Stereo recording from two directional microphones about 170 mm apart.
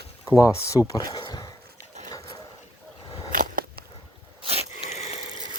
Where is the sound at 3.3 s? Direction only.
55° right (ahead or behind).